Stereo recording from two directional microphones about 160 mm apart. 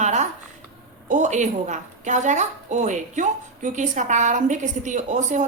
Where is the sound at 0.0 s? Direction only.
45° right (ahead or behind).